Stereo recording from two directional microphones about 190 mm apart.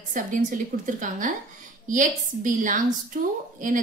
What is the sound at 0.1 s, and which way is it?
A woman's voice, 45° right (ahead or behind).